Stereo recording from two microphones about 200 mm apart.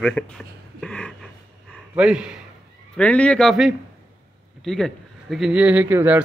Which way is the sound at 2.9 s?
5° left (ahead or behind).